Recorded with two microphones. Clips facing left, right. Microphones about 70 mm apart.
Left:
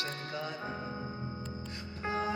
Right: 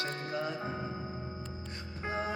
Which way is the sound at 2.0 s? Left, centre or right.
Right.